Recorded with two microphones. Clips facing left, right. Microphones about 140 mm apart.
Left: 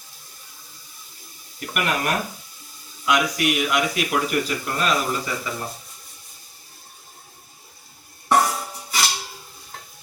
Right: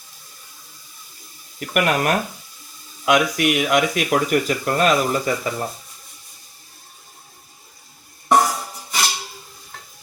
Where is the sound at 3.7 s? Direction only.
50° right (ahead or behind).